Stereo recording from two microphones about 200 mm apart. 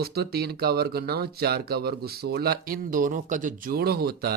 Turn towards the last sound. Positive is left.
turn(degrees=-50)  # may be behind; listen again after turning